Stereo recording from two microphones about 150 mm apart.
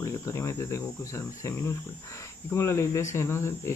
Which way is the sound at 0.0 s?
20° left (ahead or behind).